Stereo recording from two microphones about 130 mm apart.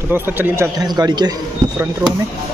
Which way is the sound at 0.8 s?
30° right (ahead or behind).